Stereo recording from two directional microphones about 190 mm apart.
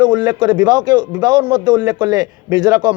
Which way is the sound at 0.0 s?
25° right (ahead or behind).